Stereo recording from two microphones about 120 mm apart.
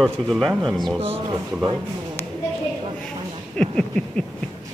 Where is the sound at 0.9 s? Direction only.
55° right (ahead or behind).